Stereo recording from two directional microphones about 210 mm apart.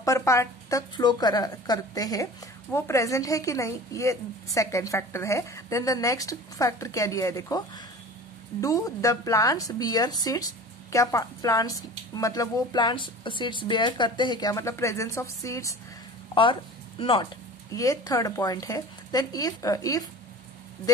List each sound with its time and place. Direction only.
0.0 s a woman's voice: 15° left (ahead or behind)
17.0 s a woman's voice: 25° left (ahead or behind)